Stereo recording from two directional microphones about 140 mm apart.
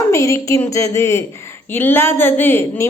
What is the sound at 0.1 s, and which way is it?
A woman's voice, 20° left (ahead or behind).